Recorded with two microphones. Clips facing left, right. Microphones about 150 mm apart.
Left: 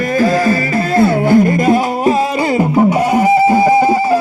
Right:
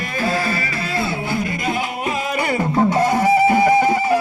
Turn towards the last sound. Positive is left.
turn(degrees=30)  # may be behind; listen again after turning